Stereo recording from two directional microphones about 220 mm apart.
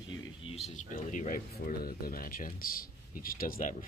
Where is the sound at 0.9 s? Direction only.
35° left (ahead or behind).